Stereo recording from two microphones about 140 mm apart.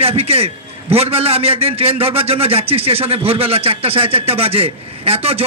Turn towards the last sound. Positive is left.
turn(degrees=-45)  # may be behind; listen again after turning